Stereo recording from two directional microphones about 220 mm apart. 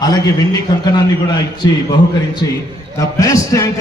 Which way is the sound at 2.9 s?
15° left (ahead or behind).